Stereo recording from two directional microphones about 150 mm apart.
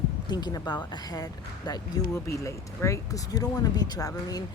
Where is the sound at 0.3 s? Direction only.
25° left (ahead or behind).